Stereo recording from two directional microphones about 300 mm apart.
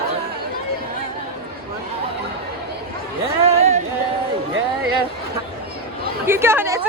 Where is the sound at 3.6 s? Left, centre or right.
Right.